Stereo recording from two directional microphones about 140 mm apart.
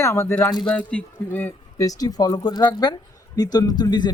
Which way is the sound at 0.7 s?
15° left (ahead or behind).